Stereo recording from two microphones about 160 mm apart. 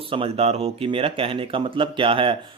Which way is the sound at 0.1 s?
35° right (ahead or behind).